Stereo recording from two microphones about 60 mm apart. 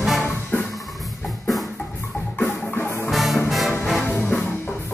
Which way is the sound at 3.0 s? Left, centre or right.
Centre.